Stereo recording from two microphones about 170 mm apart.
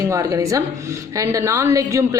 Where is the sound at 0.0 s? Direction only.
20° right (ahead or behind).